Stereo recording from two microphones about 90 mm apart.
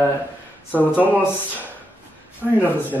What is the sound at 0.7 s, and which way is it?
Speech, 20° left (ahead or behind).